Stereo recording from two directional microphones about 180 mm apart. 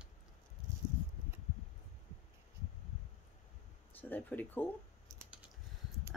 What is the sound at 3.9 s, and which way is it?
Speech, 10° left (ahead or behind).